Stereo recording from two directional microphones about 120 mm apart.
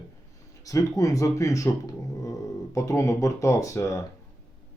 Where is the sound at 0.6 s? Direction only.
30° left (ahead or behind).